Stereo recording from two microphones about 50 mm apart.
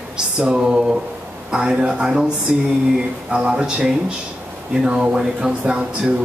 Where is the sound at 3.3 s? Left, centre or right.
Right.